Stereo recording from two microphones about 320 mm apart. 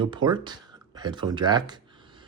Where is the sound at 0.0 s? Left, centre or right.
Centre.